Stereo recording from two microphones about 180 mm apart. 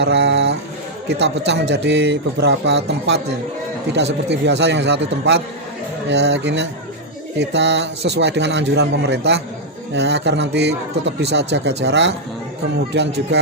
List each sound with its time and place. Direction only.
0.0 s a man's voice: 80° right